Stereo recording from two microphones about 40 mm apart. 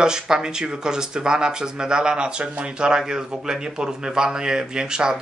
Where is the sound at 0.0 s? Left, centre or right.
Centre.